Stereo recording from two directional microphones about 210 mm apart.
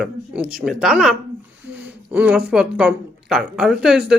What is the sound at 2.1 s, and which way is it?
Speech, 5° right (ahead or behind).